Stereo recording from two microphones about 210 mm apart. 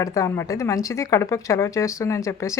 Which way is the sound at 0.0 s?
15° left (ahead or behind).